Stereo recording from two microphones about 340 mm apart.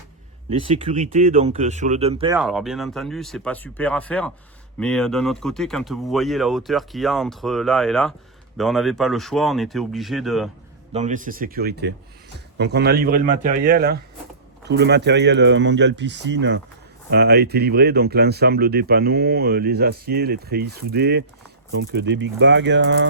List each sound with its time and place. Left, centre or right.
0.6 s speech: centre
2.4 s speech: centre
10.9 s speech: right